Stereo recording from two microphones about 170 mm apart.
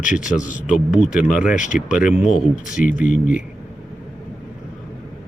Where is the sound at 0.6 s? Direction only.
5° right (ahead or behind).